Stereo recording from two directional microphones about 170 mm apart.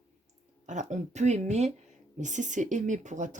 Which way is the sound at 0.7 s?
45° right (ahead or behind).